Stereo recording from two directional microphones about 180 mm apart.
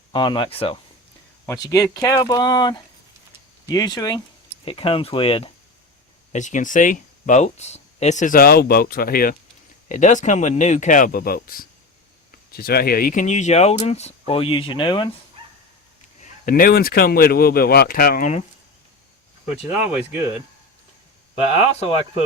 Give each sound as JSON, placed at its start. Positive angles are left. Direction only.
{"t": 0.1, "sound": "speech", "side_deg": 25}
{"t": 1.5, "sound": "speech", "side_deg": 20}
{"t": 6.3, "sound": "speech", "side_deg": 45}
{"t": 9.9, "sound": "speech", "side_deg": 45}
{"t": 16.2, "sound": "speech", "side_deg": 50}
{"t": 19.8, "sound": "speech", "side_deg": -10}
{"t": 21.5, "sound": "speech", "side_deg": 30}